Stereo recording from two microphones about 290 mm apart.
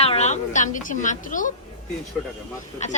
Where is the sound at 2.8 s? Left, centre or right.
Left.